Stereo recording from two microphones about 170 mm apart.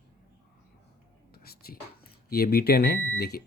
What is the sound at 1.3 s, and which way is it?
Whispering, 65° left (ahead or behind).